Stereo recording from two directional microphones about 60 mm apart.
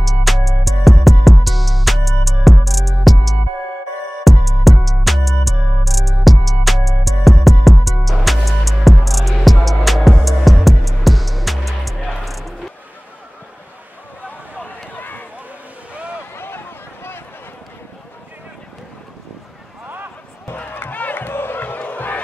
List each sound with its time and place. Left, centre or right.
0.0 s music: centre
14.6 s run: left
16.3 s a sound: left
20.5 s crowd: left